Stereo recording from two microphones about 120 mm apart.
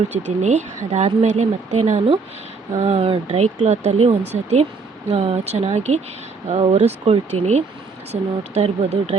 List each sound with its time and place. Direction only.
0.1 s speech: 75° right (ahead or behind); by 3.2 s 55° right (ahead or behind)
3.2 s speech: 70° right (ahead or behind)